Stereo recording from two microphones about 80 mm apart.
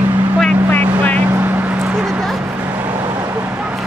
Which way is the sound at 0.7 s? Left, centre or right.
Left.